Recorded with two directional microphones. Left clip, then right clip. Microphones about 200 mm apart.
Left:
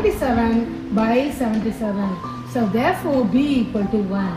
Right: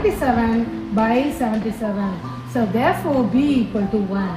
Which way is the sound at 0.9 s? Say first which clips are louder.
Even; centre (ahead or behind).